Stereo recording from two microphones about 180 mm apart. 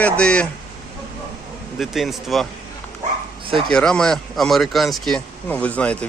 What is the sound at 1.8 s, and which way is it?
Speech, centre (ahead or behind).